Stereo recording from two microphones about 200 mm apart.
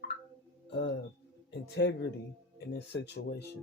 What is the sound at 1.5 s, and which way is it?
Speech, 60° left (ahead or behind).